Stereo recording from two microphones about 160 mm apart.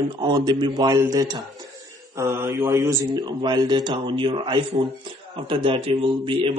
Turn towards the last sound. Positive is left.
turn(degrees=-35)  # may be behind; listen again after turning